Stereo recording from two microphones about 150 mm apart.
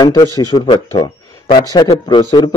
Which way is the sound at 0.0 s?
25° left (ahead or behind).